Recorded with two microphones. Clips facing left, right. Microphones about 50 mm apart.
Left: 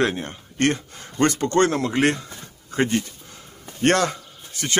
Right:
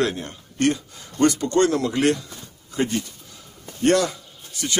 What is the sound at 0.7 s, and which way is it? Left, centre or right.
Speech, left.